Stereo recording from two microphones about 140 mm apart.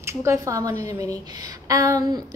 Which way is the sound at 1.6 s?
25° right (ahead or behind).